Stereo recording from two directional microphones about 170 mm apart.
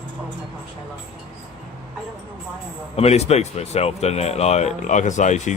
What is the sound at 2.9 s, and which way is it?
Speech, 40° left (ahead or behind).